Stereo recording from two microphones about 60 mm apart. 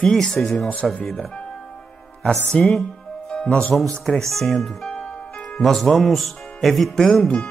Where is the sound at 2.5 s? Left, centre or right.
Centre.